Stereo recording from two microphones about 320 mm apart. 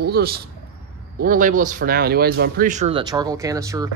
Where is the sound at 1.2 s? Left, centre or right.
Right.